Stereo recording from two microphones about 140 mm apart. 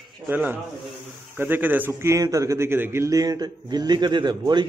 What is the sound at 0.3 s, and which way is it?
A man's voice, 15° right (ahead or behind).